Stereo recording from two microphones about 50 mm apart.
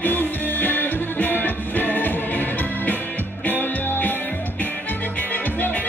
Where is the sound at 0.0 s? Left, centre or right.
Left.